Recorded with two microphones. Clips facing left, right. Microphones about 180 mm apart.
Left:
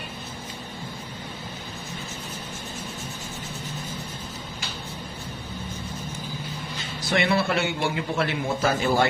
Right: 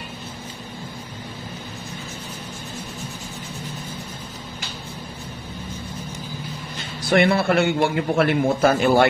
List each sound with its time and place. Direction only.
7.1 s a man's voice: 55° right (ahead or behind)